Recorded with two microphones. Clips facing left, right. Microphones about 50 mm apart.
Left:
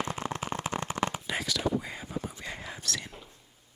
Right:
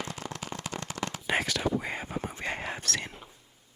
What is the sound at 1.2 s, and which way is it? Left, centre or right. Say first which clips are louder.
Whispering: right 3 dB; right.